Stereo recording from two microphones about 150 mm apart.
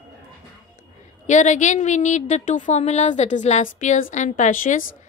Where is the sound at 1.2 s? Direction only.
55° left (ahead or behind).